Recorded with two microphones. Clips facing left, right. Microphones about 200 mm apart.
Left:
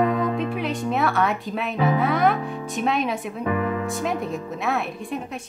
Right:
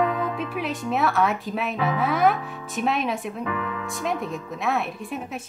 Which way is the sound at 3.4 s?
45° left (ahead or behind).